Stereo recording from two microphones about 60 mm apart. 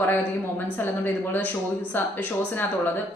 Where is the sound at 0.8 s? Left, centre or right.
Left.